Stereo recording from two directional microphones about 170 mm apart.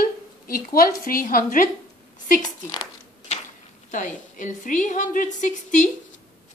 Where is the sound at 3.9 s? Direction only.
50° left (ahead or behind).